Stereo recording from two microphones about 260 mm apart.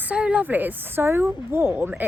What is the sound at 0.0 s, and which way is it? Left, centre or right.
Speech, centre.